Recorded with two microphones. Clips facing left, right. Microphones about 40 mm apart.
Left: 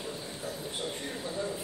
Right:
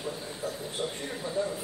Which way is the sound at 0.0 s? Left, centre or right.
Centre.